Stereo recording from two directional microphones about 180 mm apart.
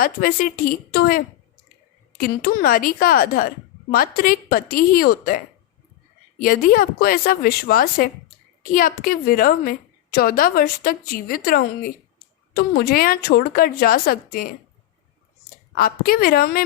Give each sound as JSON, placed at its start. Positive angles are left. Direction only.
{"t": 0.0, "sound": "a woman's voice", "side_deg": 55}
{"t": 6.4, "sound": "a woman's voice", "side_deg": 55}
{"t": 15.7, "sound": "a woman's voice", "side_deg": 55}